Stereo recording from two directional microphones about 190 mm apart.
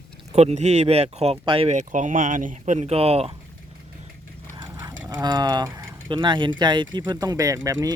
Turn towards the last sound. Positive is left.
turn(degrees=-20)  # may be behind; listen again after turning